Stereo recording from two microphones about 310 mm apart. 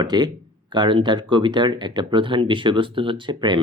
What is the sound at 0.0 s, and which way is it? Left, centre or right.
Speech, centre.